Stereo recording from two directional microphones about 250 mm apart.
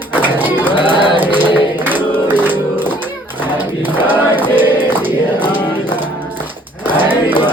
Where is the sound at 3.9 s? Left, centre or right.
Centre.